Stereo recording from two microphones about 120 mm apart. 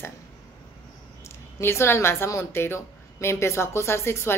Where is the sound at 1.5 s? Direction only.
20° left (ahead or behind).